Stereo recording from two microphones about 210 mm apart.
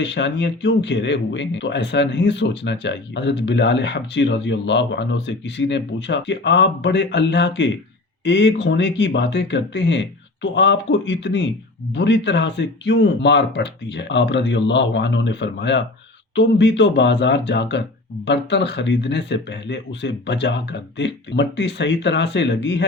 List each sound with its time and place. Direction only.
0.0 s speech: 60° left (ahead or behind)